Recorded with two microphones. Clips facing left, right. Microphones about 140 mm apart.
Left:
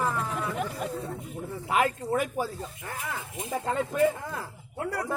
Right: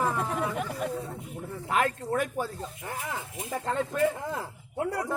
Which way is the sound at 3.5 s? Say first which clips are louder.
Left 1 dB; 5° left (ahead or behind).